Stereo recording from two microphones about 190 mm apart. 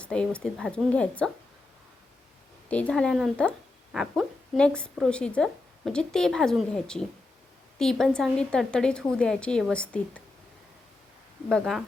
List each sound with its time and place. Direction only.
0.0 s speech: 5° left (ahead or behind)
2.6 s speech: 5° left (ahead or behind)
11.4 s speech: centre (ahead or behind)